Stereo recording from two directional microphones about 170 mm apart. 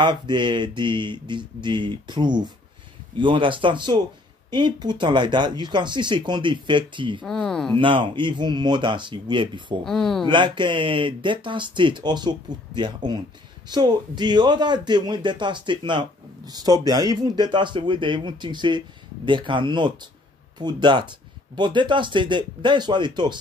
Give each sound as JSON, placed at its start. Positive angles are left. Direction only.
{"t": 0.0, "sound": "a man's voice", "side_deg": -25}
{"t": 7.2, "sound": "speech", "side_deg": 5}
{"t": 7.7, "sound": "a man's voice", "side_deg": -30}
{"t": 9.8, "sound": "speech", "side_deg": 0}
{"t": 10.2, "sound": "a man's voice", "side_deg": -25}